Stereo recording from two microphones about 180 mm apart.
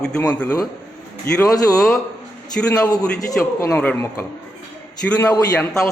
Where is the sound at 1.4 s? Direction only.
20° left (ahead or behind).